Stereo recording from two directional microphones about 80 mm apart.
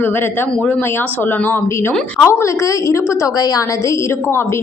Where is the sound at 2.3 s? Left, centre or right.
Left.